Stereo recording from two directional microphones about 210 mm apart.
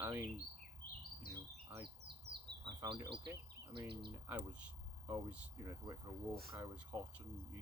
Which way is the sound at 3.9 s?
50° right (ahead or behind).